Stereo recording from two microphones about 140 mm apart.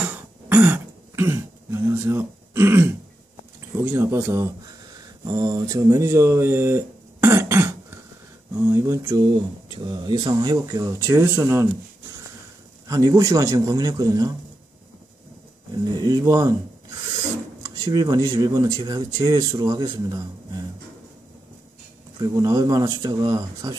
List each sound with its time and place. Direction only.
0.0 s throat clearing: 15° right (ahead or behind)
3.7 s speech: 15° right (ahead or behind)
5.2 s speech: 30° right (ahead or behind)
9.8 s speech: 30° right (ahead or behind)
12.8 s speech: 25° right (ahead or behind)
15.9 s speech: 30° right (ahead or behind)
17.6 s speech: 25° right (ahead or behind)
22.2 s speech: 25° right (ahead or behind)